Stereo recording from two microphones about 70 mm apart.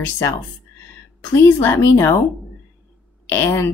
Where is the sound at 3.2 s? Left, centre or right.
Left.